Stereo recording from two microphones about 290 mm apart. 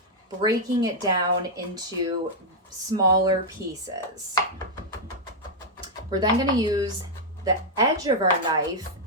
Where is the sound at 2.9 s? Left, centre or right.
Centre.